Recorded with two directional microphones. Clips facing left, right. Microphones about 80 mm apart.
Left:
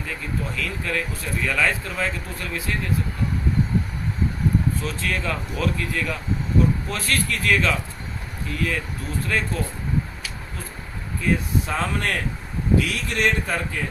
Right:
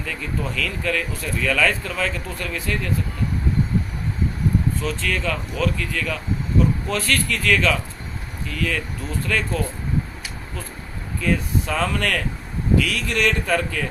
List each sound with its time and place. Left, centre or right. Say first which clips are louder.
0.1 s speech: right 2 dB; left
4.8 s speech: right 2 dB; left
11.2 s speech: right 1 dB; left